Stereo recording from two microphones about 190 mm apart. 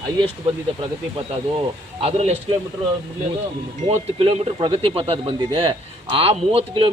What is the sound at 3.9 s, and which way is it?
Speech, 30° right (ahead or behind).